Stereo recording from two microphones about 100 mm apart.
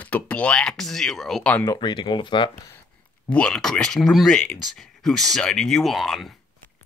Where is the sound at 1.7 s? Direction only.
45° left (ahead or behind).